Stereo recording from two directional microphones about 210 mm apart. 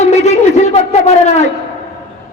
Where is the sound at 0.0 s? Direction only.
30° left (ahead or behind).